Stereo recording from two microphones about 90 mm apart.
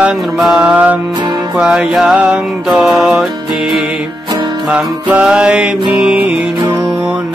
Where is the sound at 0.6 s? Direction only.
15° right (ahead or behind).